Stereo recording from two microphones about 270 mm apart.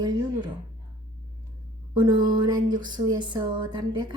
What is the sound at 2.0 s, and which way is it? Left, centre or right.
A woman's voice, centre.